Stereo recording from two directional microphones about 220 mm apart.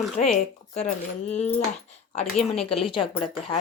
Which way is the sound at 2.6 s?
25° left (ahead or behind).